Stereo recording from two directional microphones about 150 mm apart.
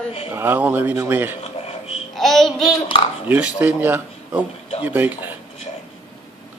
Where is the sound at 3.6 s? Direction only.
10° right (ahead or behind).